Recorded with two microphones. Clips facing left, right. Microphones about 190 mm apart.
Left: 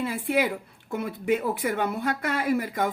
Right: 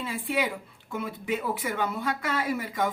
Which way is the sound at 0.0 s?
55° left (ahead or behind).